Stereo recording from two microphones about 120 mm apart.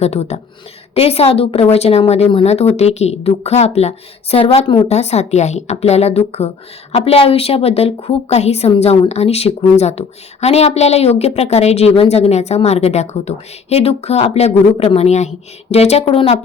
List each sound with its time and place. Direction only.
0.0 s a woman's voice: 60° left (ahead or behind)